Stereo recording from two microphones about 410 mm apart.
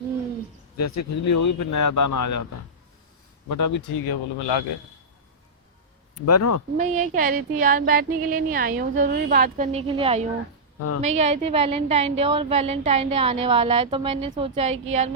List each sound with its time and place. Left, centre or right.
0.8 s speech: left
3.5 s speech: left
6.1 s speech: left
6.7 s a sound: centre
11.0 s a woman's voice: centre